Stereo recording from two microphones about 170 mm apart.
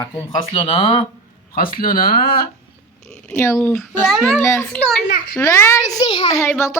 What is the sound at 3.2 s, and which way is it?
Speech, 15° left (ahead or behind).